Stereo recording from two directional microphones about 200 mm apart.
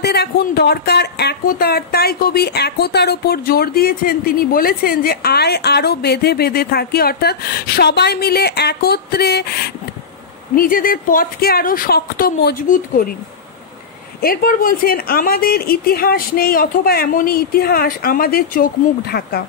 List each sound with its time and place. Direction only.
0.0 s speech: 55° left (ahead or behind)
10.5 s speech: 45° left (ahead or behind)
14.2 s speech: 45° left (ahead or behind)